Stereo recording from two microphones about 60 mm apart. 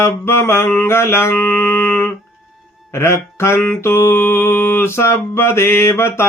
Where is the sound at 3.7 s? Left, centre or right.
Left.